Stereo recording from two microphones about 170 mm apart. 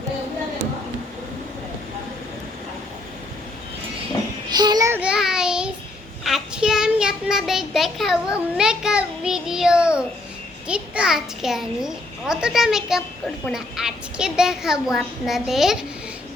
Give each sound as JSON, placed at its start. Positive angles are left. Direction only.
{"t": 4.4, "sound": "child singing", "side_deg": -25}
{"t": 4.9, "sound": "child singing", "side_deg": -5}
{"t": 10.7, "sound": "a woman's voice", "side_deg": -5}